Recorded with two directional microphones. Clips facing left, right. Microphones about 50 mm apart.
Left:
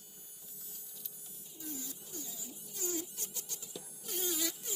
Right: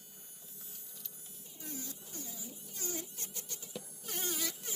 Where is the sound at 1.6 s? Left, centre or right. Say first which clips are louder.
Even; right.